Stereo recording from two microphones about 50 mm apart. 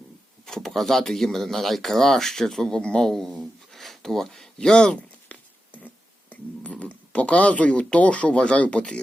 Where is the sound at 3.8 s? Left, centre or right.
Centre.